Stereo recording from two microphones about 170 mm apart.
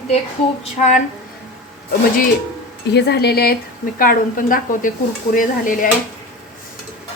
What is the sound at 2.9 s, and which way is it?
A woman's voice, 75° left (ahead or behind).